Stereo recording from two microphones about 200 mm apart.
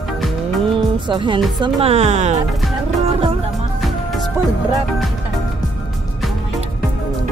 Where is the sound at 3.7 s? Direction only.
Centre (ahead or behind).